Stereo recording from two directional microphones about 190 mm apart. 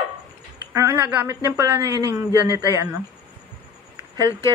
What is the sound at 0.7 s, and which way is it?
A woman's voice, 15° right (ahead or behind).